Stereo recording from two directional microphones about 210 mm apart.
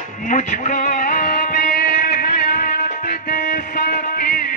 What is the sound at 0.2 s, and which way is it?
Music, 40° left (ahead or behind).